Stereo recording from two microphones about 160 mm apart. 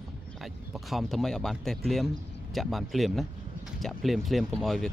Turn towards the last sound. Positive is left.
turn(degrees=0)  # may be behind; listen again after turning